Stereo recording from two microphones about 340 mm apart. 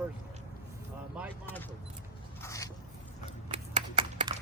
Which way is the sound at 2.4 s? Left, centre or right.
Centre.